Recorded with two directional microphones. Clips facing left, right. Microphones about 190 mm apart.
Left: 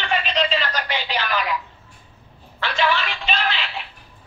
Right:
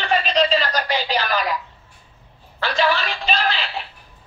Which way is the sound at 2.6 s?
40° right (ahead or behind).